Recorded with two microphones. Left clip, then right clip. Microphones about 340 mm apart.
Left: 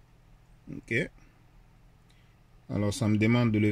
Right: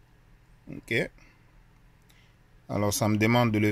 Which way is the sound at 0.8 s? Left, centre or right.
Centre.